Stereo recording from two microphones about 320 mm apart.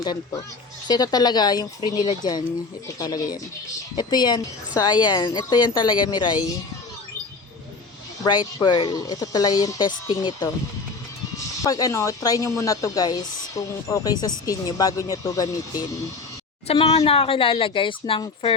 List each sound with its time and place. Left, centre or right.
0.0 s speech: centre
8.2 s speech: centre
11.6 s speech: centre